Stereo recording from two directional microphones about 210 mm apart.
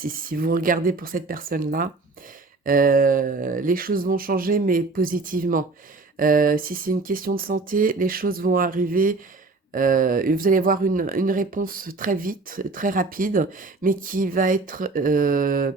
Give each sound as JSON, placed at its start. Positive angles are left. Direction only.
{"t": 0.0, "sound": "speech", "side_deg": -45}